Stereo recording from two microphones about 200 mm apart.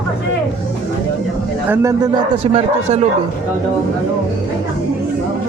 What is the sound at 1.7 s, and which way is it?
A man's voice, 15° right (ahead or behind).